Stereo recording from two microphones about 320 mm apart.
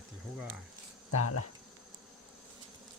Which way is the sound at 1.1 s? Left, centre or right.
Left.